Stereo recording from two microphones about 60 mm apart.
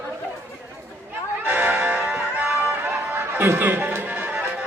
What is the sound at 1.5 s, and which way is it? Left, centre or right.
Music, right.